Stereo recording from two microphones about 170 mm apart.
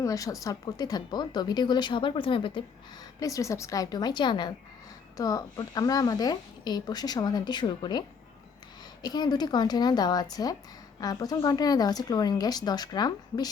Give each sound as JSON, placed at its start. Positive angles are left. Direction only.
{"t": 0.0, "sound": "a woman's voice", "side_deg": 20}
{"t": 3.2, "sound": "a woman's voice", "side_deg": 20}